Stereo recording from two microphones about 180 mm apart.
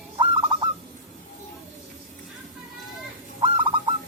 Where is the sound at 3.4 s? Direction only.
25° right (ahead or behind).